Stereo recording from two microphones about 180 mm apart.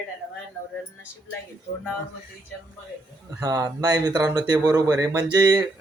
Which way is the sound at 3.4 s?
20° right (ahead or behind).